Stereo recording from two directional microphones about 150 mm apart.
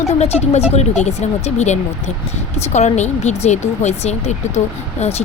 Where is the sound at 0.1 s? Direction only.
45° left (ahead or behind).